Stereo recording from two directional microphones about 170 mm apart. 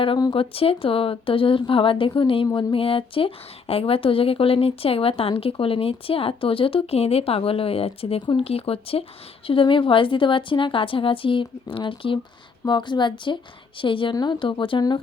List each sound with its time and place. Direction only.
0.0 s a woman's voice: 25° left (ahead or behind)